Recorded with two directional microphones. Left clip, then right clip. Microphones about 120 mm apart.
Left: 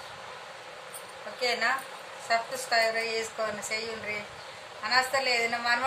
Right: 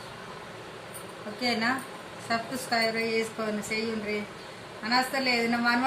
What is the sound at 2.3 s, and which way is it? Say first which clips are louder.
A woman's voice: left 2 dB; 25° left (ahead or behind).